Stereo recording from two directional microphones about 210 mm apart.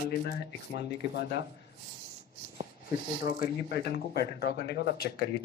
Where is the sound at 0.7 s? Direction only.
30° right (ahead or behind).